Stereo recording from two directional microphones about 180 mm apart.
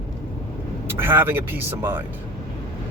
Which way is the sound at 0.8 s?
10° right (ahead or behind).